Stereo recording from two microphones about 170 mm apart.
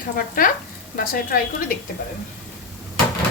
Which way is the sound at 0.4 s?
55° left (ahead or behind).